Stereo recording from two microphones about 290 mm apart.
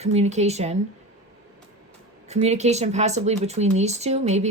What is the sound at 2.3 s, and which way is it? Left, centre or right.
Speech, right.